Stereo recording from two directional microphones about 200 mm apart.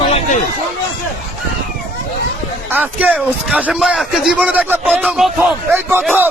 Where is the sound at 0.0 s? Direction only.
30° left (ahead or behind).